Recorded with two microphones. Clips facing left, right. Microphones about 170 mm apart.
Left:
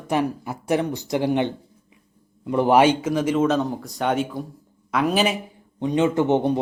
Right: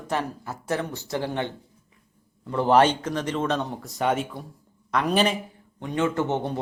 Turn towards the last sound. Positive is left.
turn(degrees=20)  # may be behind; listen again after turning